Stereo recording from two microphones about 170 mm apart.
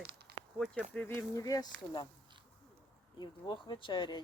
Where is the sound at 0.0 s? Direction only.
75° right (ahead or behind).